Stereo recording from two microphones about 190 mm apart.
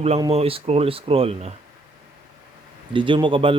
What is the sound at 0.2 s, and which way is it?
Speech, 30° right (ahead or behind).